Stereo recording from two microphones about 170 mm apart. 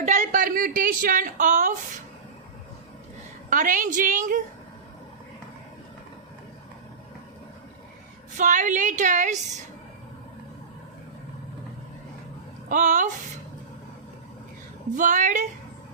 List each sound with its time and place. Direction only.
0.0 s a woman's voice: 45° right (ahead or behind)
3.5 s a woman's voice: 50° right (ahead or behind)
8.4 s a woman's voice: 45° right (ahead or behind)
12.6 s speech: 50° right (ahead or behind)
14.9 s a woman's voice: 45° right (ahead or behind)